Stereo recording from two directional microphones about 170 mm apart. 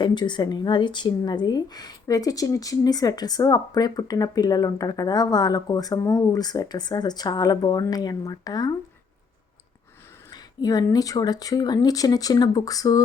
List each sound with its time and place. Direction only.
0.0 s a woman's voice: 25° left (ahead or behind)
10.2 s a woman's voice: 20° left (ahead or behind)